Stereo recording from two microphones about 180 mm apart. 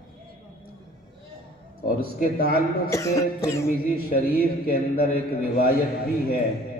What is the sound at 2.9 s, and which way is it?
Music, 15° left (ahead or behind).